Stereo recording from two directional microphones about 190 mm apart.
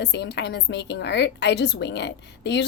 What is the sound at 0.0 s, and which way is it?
A woman's voice, 65° left (ahead or behind).